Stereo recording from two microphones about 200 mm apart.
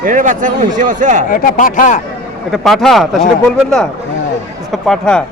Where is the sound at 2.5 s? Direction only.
Centre (ahead or behind).